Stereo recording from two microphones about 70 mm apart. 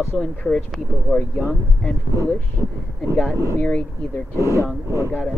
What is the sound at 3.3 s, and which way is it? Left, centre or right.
Speech, left.